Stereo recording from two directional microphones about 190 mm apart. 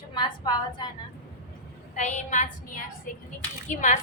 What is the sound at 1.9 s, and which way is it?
A woman's voice, 35° left (ahead or behind).